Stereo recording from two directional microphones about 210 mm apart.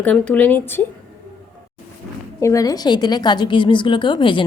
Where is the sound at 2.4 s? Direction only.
15° left (ahead or behind).